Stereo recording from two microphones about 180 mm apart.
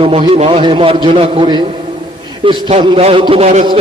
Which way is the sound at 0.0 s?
30° right (ahead or behind).